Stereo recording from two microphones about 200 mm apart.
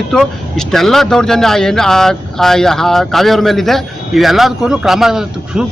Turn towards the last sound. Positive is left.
turn(degrees=-5)  # may be behind; listen again after turning